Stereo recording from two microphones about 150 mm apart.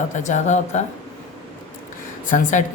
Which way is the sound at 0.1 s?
50° left (ahead or behind).